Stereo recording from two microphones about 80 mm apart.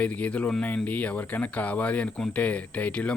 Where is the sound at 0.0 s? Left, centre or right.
Centre.